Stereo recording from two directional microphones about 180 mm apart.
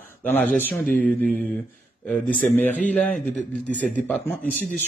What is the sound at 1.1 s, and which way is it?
Mantra, 5° left (ahead or behind).